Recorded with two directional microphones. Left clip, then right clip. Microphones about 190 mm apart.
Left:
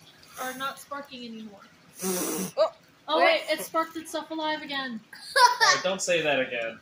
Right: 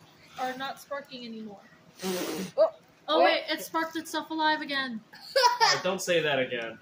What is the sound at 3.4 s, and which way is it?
A woman's voice, 20° right (ahead or behind).